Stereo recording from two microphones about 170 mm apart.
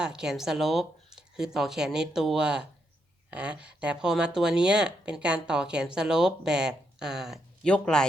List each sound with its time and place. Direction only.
0.0 s speech: 5° right (ahead or behind)